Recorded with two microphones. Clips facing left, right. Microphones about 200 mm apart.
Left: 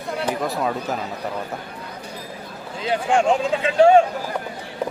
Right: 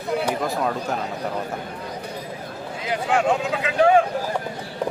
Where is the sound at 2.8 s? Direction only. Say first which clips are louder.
Left 2 dB; 30° left (ahead or behind).